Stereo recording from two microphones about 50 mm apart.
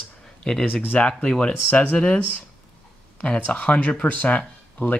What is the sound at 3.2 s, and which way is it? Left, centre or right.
Speech, left.